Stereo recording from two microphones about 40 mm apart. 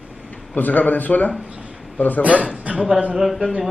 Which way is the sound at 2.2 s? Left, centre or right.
Right.